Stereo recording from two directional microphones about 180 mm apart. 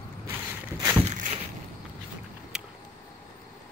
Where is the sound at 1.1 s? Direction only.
45° right (ahead or behind).